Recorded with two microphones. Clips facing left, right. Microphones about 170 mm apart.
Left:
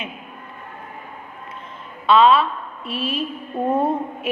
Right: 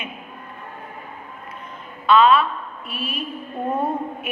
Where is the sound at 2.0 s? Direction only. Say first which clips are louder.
Left 1 dB; 30° left (ahead or behind).